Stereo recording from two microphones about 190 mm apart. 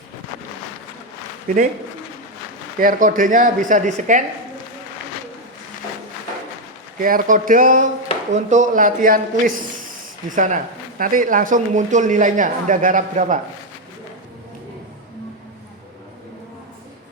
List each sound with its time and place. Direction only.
2.7 s speech: 45° right (ahead or behind)
7.0 s speech: 45° right (ahead or behind)